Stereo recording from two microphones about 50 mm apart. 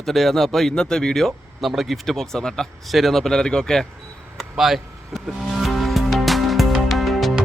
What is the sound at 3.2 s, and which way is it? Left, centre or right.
Speech, centre.